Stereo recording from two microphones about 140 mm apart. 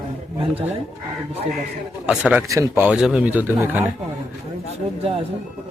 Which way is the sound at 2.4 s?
25° right (ahead or behind).